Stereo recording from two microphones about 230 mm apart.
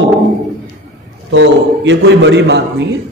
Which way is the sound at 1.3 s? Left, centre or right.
Right.